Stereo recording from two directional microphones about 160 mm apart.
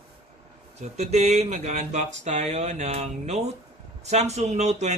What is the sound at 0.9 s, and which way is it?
Speech, 45° right (ahead or behind).